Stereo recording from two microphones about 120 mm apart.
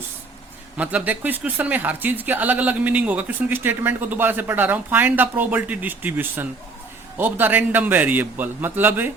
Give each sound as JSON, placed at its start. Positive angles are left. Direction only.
{"t": 0.8, "sound": "speech", "side_deg": -10}